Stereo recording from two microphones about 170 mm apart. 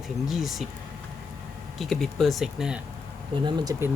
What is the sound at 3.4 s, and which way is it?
Speech, 15° right (ahead or behind).